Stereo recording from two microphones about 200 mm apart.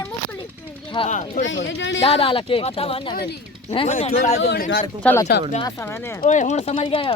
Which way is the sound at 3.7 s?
30° left (ahead or behind).